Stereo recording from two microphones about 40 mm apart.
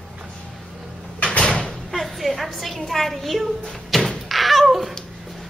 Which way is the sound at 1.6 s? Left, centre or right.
Centre.